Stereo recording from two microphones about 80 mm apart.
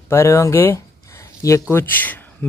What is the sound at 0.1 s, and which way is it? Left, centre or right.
Speech, left.